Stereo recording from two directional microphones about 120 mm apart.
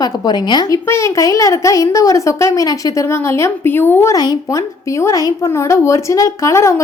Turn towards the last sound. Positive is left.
turn(degrees=25)  # may be behind; listen again after turning